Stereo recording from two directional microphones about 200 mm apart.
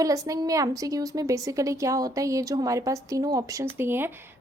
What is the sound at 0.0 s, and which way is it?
A woman's voice, 15° right (ahead or behind).